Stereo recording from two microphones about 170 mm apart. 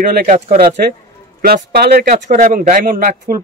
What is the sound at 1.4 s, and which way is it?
Speech, 65° right (ahead or behind).